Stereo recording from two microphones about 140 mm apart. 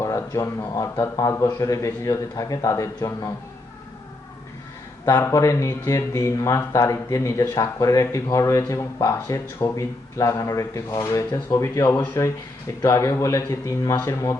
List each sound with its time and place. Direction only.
0.0 s speech: 25° left (ahead or behind)
5.0 s speech: 20° left (ahead or behind)